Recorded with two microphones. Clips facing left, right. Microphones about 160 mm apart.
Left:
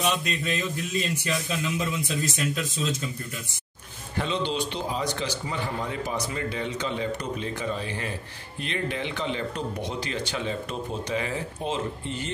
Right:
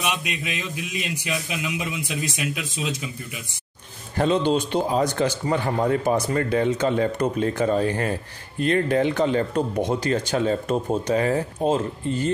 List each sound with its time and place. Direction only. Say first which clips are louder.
0.2 s speech: left 2 dB; 10° right (ahead or behind)
4.2 s a man's voice: right 7 dB; 45° right (ahead or behind)